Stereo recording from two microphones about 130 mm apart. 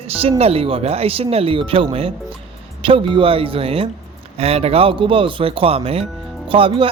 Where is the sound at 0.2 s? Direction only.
50° right (ahead or behind).